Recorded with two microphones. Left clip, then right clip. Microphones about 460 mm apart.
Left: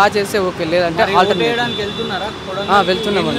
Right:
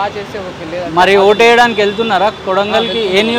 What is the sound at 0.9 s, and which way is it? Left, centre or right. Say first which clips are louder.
Speech: right 10 dB; right.